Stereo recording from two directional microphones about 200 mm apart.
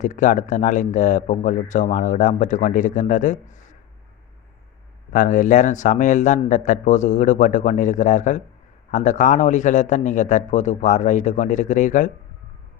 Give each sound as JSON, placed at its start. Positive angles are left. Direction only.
{"t": 0.0, "sound": "speech", "side_deg": 40}
{"t": 5.1, "sound": "speech", "side_deg": 40}